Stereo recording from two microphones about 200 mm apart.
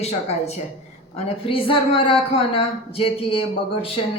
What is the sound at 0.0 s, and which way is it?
A woman's voice, 30° left (ahead or behind).